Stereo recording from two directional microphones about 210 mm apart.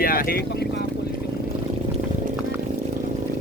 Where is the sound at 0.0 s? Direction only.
45° left (ahead or behind).